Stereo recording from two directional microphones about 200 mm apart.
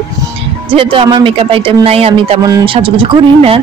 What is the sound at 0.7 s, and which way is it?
Speech, 25° right (ahead or behind).